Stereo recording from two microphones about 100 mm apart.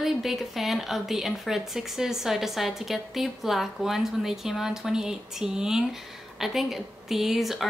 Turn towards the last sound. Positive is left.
turn(degrees=0)  # may be behind; listen again after turning